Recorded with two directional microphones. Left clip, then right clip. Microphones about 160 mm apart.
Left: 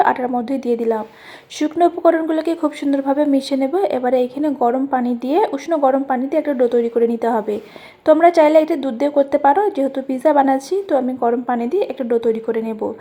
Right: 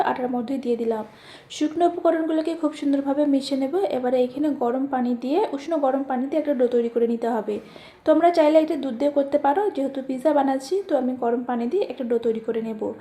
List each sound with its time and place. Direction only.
0.0 s a woman's voice: 25° left (ahead or behind)